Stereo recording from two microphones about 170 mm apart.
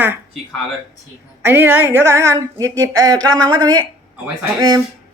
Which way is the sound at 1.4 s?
15° right (ahead or behind).